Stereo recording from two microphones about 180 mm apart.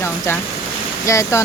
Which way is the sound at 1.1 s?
15° left (ahead or behind).